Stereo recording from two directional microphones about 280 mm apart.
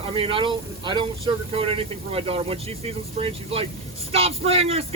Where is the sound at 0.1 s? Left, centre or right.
Centre.